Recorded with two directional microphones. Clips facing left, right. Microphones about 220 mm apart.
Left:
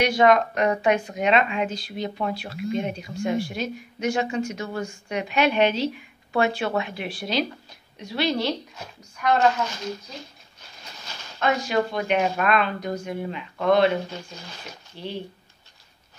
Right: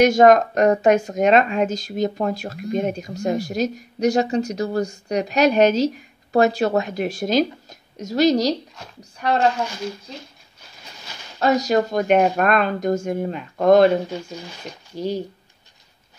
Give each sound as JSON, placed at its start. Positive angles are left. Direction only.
{"t": 0.0, "sound": "speech", "side_deg": -45}
{"t": 11.3, "sound": "speech", "side_deg": -40}
{"t": 15.0, "sound": "speech", "side_deg": -40}